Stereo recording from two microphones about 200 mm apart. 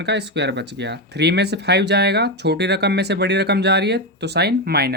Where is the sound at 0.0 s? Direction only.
60° right (ahead or behind).